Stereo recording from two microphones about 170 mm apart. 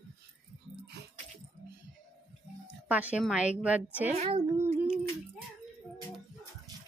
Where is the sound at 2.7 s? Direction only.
10° right (ahead or behind).